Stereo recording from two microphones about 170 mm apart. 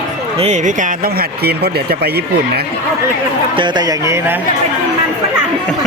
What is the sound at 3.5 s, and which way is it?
Speech, 25° right (ahead or behind).